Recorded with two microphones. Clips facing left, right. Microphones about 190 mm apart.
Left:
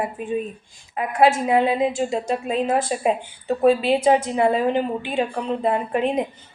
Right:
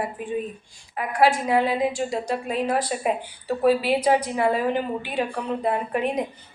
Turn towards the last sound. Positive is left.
turn(degrees=25)  # may be behind; listen again after turning